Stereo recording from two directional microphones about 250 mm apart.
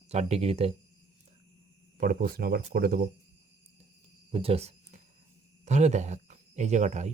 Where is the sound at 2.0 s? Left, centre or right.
Right.